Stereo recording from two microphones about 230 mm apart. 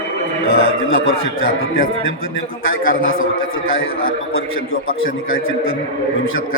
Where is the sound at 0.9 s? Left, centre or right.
Left.